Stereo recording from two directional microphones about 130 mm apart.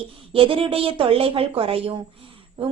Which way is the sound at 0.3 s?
45° right (ahead or behind).